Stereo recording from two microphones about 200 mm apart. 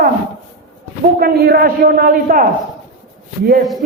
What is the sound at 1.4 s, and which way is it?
A man's voice, 50° right (ahead or behind).